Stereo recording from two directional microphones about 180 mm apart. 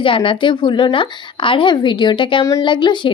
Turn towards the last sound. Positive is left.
turn(degrees=25)  # may be behind; listen again after turning